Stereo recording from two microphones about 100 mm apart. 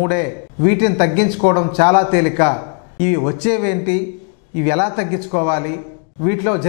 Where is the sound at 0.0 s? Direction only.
15° left (ahead or behind).